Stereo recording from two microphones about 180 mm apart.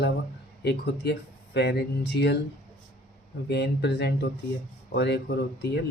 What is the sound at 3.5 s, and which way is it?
Speech, 65° left (ahead or behind).